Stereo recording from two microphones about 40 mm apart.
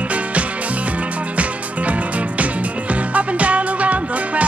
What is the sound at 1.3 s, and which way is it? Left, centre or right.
Music, right.